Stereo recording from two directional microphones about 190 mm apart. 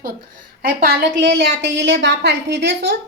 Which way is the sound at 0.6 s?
55° right (ahead or behind).